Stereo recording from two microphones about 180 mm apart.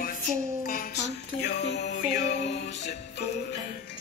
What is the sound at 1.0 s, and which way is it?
Music, 65° left (ahead or behind).